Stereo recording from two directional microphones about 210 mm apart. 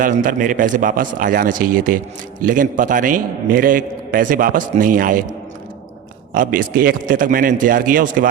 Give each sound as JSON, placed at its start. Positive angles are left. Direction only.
{"t": 0.0, "sound": "a man's voice", "side_deg": -40}
{"t": 6.3, "sound": "a man's voice", "side_deg": -40}